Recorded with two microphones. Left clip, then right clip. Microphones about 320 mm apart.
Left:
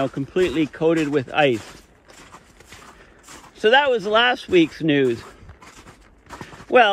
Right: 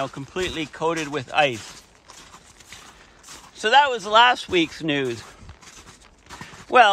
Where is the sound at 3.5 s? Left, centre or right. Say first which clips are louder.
Left 1 dB; right.